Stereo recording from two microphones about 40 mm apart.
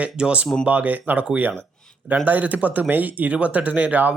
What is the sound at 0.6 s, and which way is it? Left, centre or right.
Speech, right.